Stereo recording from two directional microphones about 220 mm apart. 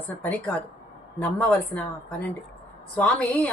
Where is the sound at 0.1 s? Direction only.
10° left (ahead or behind).